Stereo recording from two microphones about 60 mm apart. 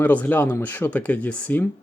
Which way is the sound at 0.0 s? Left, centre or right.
Left.